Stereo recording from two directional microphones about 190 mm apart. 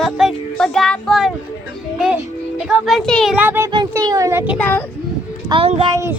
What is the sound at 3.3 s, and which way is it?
Speech, 10° right (ahead or behind).